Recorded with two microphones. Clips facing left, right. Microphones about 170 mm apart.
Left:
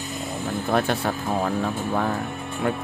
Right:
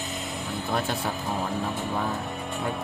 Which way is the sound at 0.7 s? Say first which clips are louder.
Left 6 dB; 65° left (ahead or behind).